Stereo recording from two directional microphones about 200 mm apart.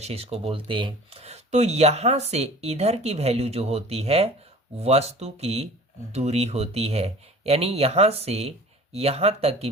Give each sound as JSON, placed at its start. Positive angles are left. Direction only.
{"t": 0.0, "sound": "speech", "side_deg": -30}